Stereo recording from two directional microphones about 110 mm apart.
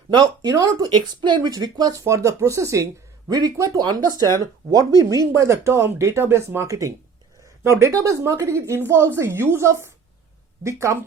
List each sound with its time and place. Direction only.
0.1 s speech: 35° right (ahead or behind)